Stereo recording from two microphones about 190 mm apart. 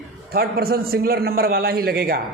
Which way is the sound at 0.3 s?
55° right (ahead or behind).